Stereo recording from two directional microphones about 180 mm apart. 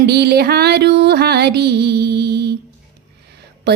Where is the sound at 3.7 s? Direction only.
65° right (ahead or behind).